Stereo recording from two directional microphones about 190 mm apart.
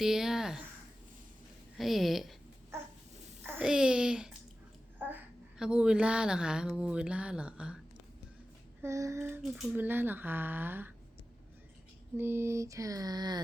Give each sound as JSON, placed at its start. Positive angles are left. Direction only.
{"t": 0.0, "sound": "speech", "side_deg": 0}
{"t": 1.8, "sound": "a woman's voice", "side_deg": 0}
{"t": 3.4, "sound": "a sound", "side_deg": -5}
{"t": 4.9, "sound": "a woman's voice", "side_deg": -10}
{"t": 8.8, "sound": "speech", "side_deg": -15}
{"t": 9.4, "sound": "speech", "side_deg": 0}
{"t": 12.1, "sound": "speech", "side_deg": -10}